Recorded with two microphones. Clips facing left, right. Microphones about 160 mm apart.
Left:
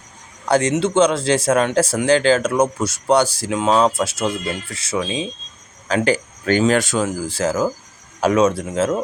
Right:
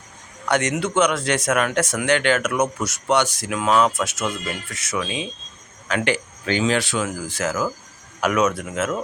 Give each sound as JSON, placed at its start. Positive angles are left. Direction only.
{"t": 0.4, "sound": "speech", "side_deg": 30}